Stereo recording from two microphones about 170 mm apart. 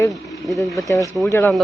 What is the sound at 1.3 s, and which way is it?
Speech, 15° left (ahead or behind).